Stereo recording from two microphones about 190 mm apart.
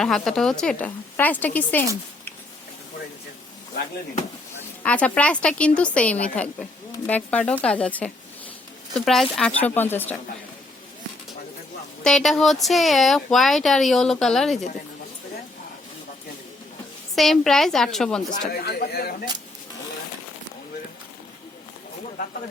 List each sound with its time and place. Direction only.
0.0 s a woman's voice: centre (ahead or behind)
4.8 s a woman's voice: 5° left (ahead or behind)
12.0 s speech: centre (ahead or behind)
17.2 s speech: centre (ahead or behind)
18.3 s speech: 50° left (ahead or behind)